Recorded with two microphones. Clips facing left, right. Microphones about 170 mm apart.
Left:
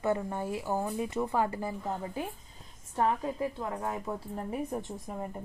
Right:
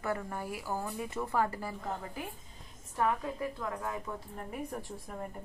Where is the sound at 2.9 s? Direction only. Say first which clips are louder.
Left 3 dB; 30° left (ahead or behind).